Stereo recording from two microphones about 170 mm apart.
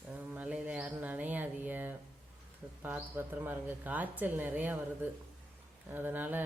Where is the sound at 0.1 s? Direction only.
10° right (ahead or behind).